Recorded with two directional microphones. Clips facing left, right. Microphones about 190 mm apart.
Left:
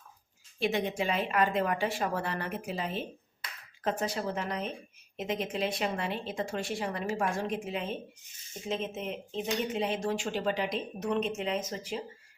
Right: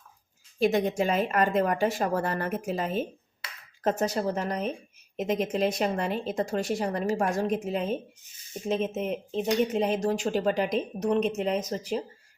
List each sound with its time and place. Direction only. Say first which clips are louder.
0.6 s speech: right 6 dB; 45° right (ahead or behind)